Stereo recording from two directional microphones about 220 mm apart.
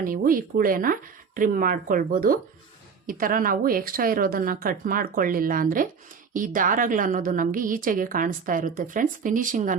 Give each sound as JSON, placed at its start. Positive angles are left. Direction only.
{"t": 0.0, "sound": "a woman's voice", "side_deg": -40}